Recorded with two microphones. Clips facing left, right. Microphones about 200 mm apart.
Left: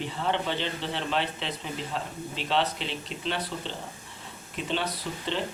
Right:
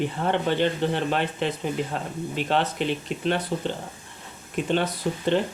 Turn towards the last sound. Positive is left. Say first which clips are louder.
# right 8 dB
turn(degrees=-50)  # may be behind; listen again after turning